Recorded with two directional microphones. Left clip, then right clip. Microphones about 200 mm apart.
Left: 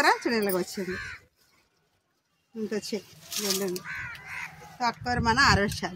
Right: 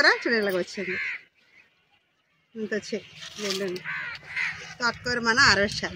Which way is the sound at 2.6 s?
30° left (ahead or behind).